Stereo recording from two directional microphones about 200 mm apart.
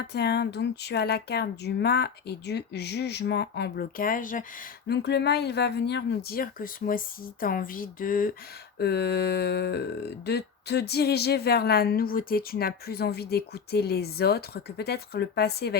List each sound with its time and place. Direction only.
0.0 s speech: 55° left (ahead or behind)
4.9 s speech: 55° left (ahead or behind)
8.8 s speech: 55° left (ahead or behind)